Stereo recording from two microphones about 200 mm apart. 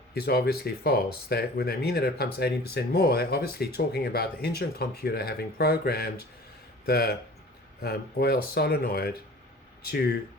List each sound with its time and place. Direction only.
0.1 s speech: 50° left (ahead or behind)